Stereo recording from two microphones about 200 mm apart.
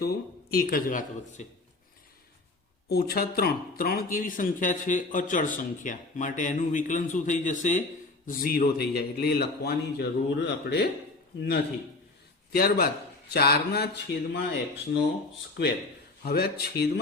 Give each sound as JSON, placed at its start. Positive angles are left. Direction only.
{"t": 0.0, "sound": "speech", "side_deg": 50}
{"t": 2.9, "sound": "a man's voice", "side_deg": 50}
{"t": 16.2, "sound": "speech", "side_deg": 50}